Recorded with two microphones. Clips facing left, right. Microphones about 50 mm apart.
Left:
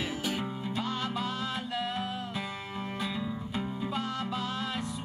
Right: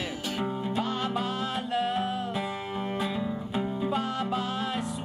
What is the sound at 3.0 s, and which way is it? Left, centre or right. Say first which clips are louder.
Music: right 2 dB; right.